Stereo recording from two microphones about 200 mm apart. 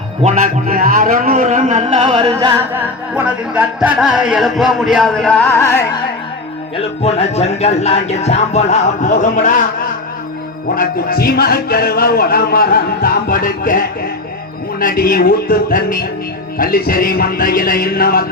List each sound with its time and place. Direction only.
0.2 s a man's voice: 35° right (ahead or behind)
2.7 s music: 5° right (ahead or behind); by 5.8 s 10° left (ahead or behind)
6.7 s music: 30° left (ahead or behind)
10.8 s music: 50° left (ahead or behind)